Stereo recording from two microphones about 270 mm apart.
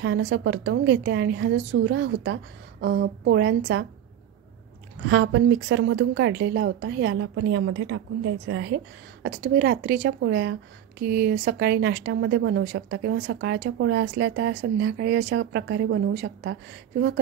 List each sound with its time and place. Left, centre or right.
0.0 s speech: right
5.0 s a woman's voice: right